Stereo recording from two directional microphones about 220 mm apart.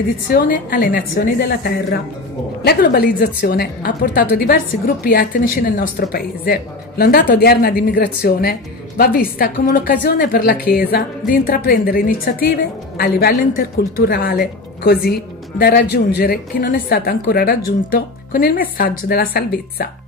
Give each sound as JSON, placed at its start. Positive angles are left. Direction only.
{"t": 0.3, "sound": "a woman's voice", "side_deg": 40}